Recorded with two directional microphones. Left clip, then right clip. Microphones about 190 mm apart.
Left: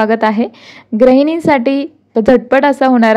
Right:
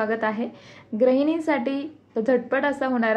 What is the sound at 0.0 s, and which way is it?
A woman's voice, 55° left (ahead or behind).